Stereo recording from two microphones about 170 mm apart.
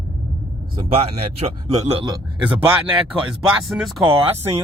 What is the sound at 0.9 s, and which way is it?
Speech, 35° right (ahead or behind).